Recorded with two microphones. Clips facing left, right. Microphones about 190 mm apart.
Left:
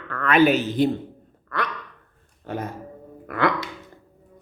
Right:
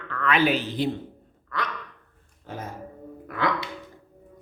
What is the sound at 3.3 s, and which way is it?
Hiccup, 65° left (ahead or behind).